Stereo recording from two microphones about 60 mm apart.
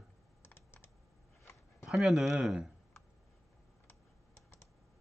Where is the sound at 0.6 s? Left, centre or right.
Left.